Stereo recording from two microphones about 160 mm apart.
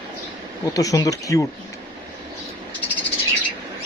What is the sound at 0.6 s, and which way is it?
Speech, 20° left (ahead or behind).